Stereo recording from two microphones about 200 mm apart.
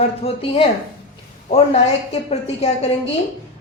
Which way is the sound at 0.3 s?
30° left (ahead or behind).